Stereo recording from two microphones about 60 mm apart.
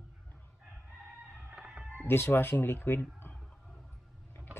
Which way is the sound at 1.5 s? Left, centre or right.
Centre.